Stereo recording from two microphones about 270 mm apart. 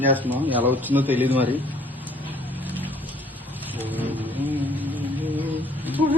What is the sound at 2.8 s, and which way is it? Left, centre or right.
Music, centre.